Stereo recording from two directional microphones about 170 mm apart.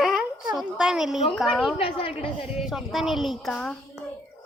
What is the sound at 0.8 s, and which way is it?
Speech, 5° right (ahead or behind).